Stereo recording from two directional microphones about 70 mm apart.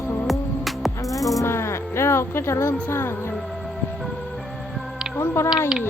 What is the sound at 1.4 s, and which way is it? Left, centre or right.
Speech, left.